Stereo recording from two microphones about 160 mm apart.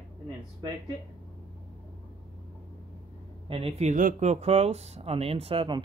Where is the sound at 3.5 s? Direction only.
35° right (ahead or behind).